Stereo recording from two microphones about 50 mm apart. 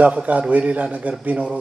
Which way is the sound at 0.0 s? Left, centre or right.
Right.